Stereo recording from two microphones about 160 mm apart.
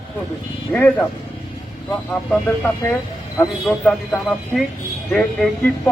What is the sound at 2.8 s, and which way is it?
Speech, 15° left (ahead or behind).